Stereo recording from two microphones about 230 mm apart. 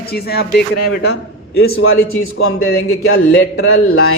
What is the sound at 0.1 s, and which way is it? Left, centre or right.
Speech, left.